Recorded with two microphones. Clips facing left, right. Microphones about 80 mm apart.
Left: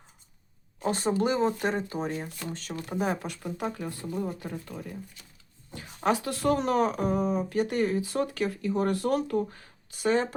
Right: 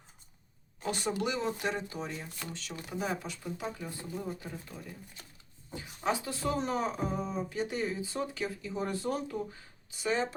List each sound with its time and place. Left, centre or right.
0.8 s speech: left
5.7 s speech: left